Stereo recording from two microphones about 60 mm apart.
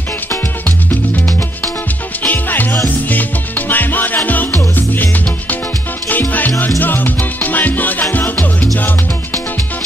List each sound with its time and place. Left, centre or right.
0.7 s music: left